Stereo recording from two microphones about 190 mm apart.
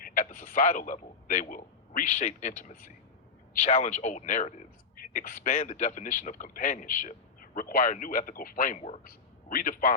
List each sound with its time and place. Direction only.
0.0 s a man's voice: 50° left (ahead or behind)
3.7 s a man's voice: 35° left (ahead or behind)